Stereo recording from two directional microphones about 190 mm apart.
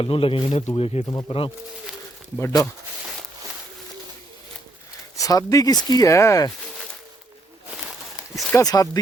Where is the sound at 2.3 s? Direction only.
15° left (ahead or behind).